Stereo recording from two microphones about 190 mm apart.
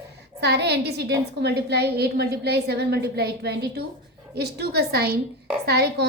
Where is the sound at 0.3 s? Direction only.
60° right (ahead or behind).